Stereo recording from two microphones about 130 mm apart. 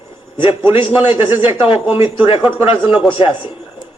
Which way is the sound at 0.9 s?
40° left (ahead or behind).